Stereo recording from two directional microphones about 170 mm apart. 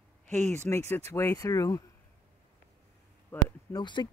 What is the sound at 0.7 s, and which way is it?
Speech, 15° left (ahead or behind).